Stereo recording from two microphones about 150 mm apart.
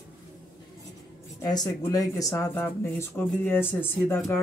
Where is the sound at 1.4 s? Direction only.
25° left (ahead or behind).